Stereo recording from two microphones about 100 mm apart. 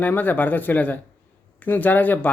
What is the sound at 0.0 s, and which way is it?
Speech, 15° left (ahead or behind).